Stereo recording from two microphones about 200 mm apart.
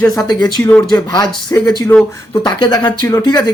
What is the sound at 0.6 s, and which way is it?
Speech, 5° left (ahead or behind).